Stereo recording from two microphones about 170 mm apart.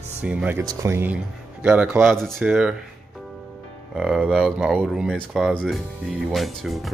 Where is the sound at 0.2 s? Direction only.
10° right (ahead or behind).